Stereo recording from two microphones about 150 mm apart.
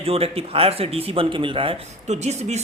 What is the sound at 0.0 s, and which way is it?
Speech, 40° right (ahead or behind).